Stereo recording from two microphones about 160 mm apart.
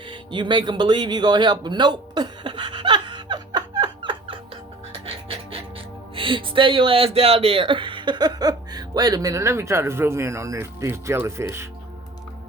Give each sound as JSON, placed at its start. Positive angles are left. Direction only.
{"t": 0.1, "sound": "a sound", "side_deg": -30}
{"t": 5.0, "sound": "music", "side_deg": -35}
{"t": 6.1, "sound": "speech", "side_deg": -35}